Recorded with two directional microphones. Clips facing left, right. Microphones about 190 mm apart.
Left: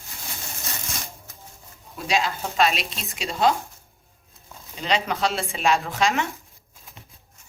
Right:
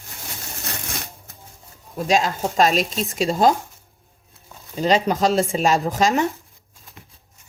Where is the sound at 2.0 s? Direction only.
45° right (ahead or behind).